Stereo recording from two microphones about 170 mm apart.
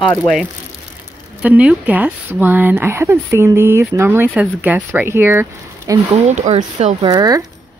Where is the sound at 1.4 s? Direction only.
5° right (ahead or behind).